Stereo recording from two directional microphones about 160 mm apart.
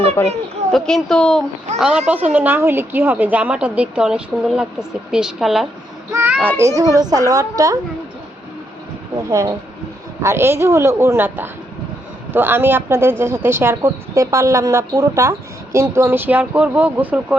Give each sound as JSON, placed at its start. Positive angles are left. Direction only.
{"t": 0.2, "sound": "a woman's voice", "side_deg": 15}
{"t": 0.7, "sound": "speech", "side_deg": 0}
{"t": 2.3, "sound": "speech", "side_deg": -10}
{"t": 6.1, "sound": "speech", "side_deg": -15}
{"t": 9.1, "sound": "speech", "side_deg": -25}